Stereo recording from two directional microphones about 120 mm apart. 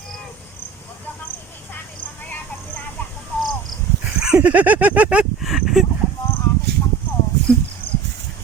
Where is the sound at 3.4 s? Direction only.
Centre (ahead or behind).